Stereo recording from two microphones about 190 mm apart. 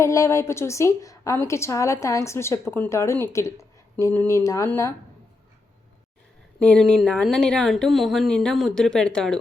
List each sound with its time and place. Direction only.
0.0 s a woman's voice: 15° left (ahead or behind)
6.7 s speech: 5° left (ahead or behind)